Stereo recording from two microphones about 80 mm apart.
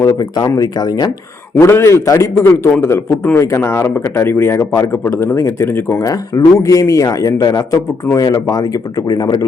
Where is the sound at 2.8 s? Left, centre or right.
Left.